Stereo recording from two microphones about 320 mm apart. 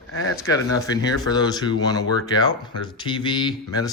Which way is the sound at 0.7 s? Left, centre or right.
Centre.